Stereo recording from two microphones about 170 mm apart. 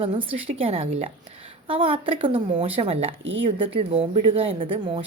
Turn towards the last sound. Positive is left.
turn(degrees=-30)  # may be behind; listen again after turning